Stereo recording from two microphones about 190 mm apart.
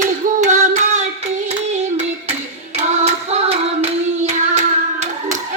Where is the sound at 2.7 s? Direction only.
35° right (ahead or behind).